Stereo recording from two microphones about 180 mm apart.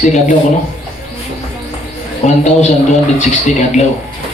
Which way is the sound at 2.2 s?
40° left (ahead or behind).